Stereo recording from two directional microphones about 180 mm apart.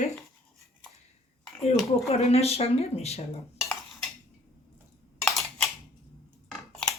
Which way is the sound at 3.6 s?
Centre (ahead or behind).